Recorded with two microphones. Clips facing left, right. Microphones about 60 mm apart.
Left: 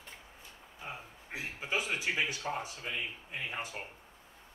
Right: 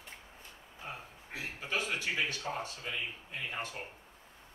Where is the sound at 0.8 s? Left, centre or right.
Centre.